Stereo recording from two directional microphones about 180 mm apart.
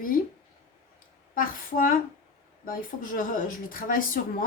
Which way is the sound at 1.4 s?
50° left (ahead or behind).